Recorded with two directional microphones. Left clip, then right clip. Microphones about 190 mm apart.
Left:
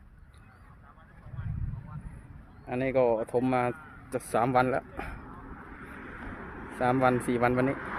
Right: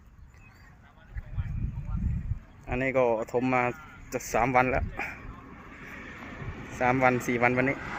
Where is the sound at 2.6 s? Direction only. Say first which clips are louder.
Even; 5° left (ahead or behind).